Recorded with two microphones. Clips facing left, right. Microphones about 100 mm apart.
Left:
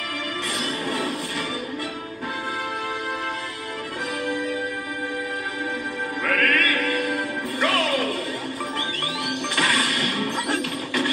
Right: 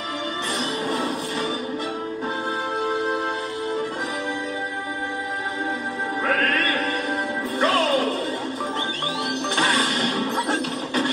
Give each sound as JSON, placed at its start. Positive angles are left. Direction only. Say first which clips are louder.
{"t": 6.2, "sound": "music", "louder": "even", "side_deg": -30}
{"t": 9.6, "sound": "music", "louder": "right 2 dB", "side_deg": -25}